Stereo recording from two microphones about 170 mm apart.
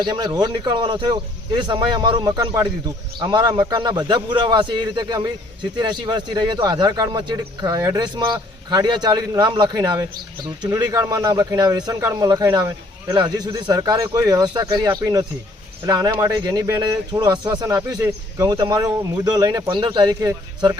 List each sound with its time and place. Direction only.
0.0 s speech: 25° right (ahead or behind)